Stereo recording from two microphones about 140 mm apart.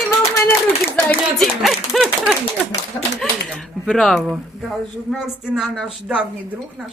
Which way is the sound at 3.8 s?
5° left (ahead or behind).